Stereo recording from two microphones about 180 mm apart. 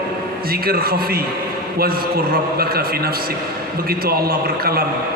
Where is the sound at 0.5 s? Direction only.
55° right (ahead or behind).